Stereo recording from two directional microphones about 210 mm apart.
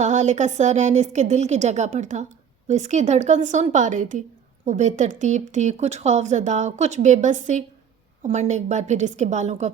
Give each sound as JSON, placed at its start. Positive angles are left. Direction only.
{"t": 0.0, "sound": "speech", "side_deg": -35}